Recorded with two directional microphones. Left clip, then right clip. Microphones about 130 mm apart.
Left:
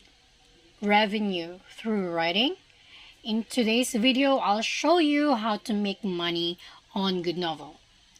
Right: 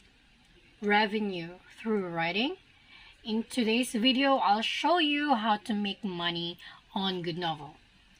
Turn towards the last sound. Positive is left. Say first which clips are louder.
# left 4 dB
turn(degrees=35)  # may be behind; listen again after turning